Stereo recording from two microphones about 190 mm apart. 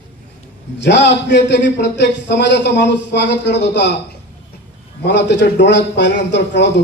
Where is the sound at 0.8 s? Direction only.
65° left (ahead or behind).